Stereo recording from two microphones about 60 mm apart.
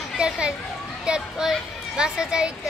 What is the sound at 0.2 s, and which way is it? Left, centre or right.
Speech, centre.